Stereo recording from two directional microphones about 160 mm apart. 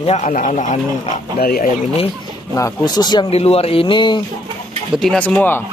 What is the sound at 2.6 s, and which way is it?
Speech, 20° left (ahead or behind).